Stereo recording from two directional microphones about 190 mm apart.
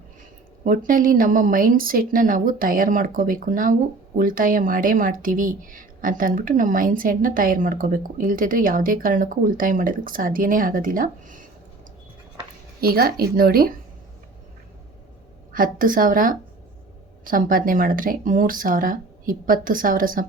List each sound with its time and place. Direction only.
0.6 s speech: 45° right (ahead or behind)
12.8 s speech: 50° right (ahead or behind)
15.5 s speech: 45° right (ahead or behind)